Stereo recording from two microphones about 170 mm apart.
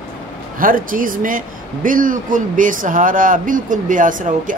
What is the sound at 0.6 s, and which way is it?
Speech, 55° right (ahead or behind).